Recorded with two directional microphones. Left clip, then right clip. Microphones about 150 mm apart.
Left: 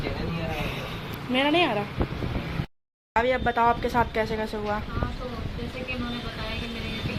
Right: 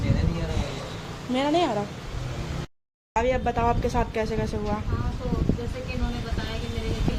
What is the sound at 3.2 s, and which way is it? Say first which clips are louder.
Speech: left 1 dB; 10° right (ahead or behind).